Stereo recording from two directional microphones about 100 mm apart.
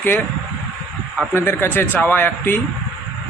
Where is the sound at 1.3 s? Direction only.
20° left (ahead or behind).